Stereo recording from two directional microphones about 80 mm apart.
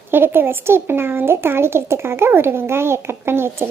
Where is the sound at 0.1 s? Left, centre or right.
Right.